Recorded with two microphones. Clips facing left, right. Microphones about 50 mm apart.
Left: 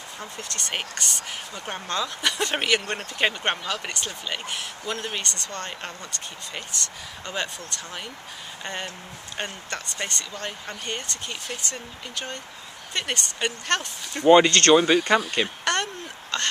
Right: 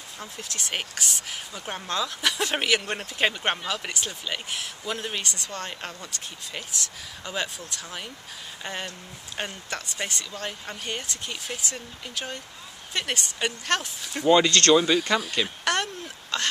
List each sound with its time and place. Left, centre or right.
0.2 s speech: centre
9.4 s speech: centre
14.2 s speech: left
15.6 s a sound: centre